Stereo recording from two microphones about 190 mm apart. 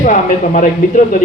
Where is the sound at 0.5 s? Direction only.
45° left (ahead or behind).